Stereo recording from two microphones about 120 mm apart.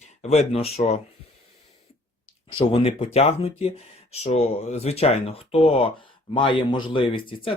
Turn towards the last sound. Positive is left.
turn(degrees=45)  # may be behind; listen again after turning